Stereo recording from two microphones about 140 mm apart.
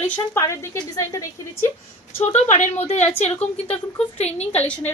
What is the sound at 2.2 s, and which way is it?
A woman's voice, 55° left (ahead or behind).